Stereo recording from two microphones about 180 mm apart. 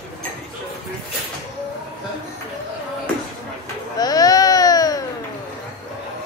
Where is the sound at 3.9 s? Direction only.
20° left (ahead or behind).